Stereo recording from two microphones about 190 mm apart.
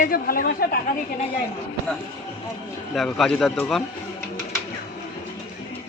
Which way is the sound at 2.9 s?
Centre (ahead or behind).